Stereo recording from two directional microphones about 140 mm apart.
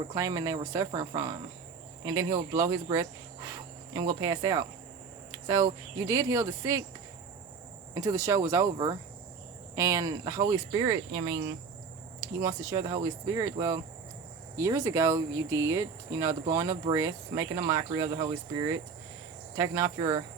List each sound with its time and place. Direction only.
0.1 s speech: 25° right (ahead or behind)
2.5 s speech: 25° right (ahead or behind)
7.9 s speech: 25° right (ahead or behind)
12.2 s speech: 25° right (ahead or behind)